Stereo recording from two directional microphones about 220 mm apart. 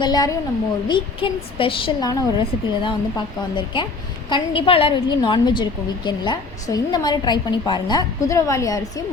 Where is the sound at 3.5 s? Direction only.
20° left (ahead or behind).